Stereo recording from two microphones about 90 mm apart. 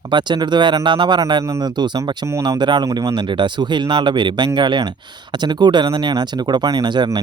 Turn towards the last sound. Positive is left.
turn(degrees=-55)  # may be behind; listen again after turning